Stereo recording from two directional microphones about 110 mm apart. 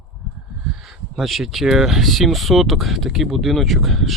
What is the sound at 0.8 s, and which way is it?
Speech, centre (ahead or behind).